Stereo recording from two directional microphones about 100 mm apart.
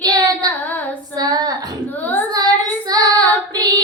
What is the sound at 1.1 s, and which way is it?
Female singing, 40° right (ahead or behind).